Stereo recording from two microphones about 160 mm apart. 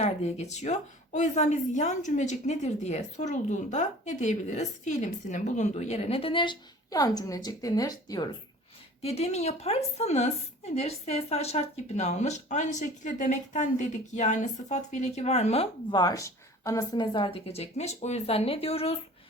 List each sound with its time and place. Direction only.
0.0 s a woman's voice: 45° left (ahead or behind); by 8.4 s 25° left (ahead or behind)
9.0 s a woman's voice: 40° left (ahead or behind)
15.9 s a woman's voice: 25° left (ahead or behind)